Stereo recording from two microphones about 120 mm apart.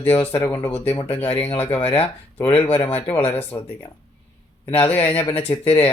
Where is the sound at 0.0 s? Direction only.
15° left (ahead or behind).